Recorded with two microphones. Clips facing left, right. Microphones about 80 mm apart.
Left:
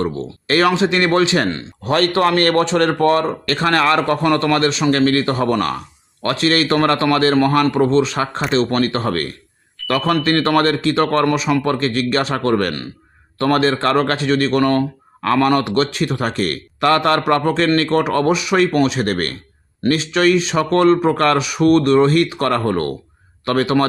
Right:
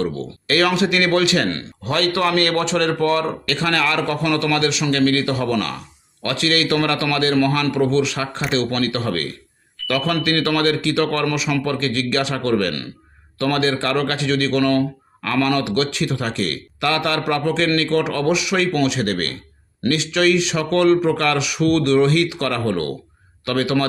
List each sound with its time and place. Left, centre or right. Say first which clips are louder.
0.0 s speech: left 2 dB; left